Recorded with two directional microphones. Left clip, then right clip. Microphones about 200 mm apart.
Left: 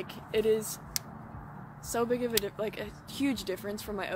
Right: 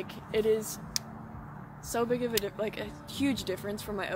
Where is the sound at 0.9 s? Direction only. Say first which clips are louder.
Right 2 dB; 30° left (ahead or behind).